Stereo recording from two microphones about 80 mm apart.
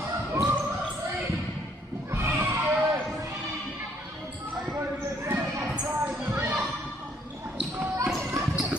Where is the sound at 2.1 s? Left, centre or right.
Right.